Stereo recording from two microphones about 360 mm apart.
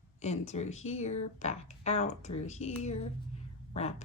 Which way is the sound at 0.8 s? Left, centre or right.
Centre.